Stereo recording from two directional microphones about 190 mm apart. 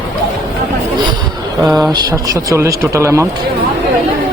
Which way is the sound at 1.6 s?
Centre (ahead or behind).